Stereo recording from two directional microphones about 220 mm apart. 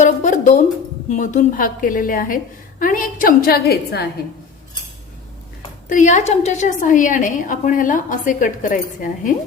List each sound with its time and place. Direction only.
0.0 s music: 35° left (ahead or behind)
1.1 s a woman's voice: 35° left (ahead or behind)
5.9 s a woman's voice: 35° left (ahead or behind)